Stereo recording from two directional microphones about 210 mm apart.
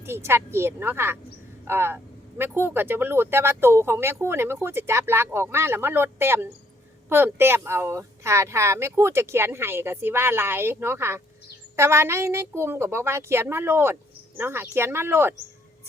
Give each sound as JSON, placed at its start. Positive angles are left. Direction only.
{"t": 0.0, "sound": "speech", "side_deg": -10}